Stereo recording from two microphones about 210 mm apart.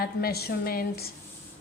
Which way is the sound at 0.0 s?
45° left (ahead or behind).